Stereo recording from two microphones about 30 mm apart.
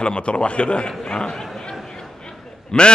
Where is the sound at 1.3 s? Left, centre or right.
Centre.